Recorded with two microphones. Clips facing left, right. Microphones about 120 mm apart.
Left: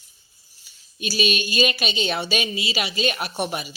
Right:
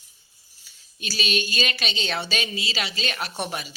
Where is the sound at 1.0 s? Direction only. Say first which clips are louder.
Left 4 dB; 10° left (ahead or behind).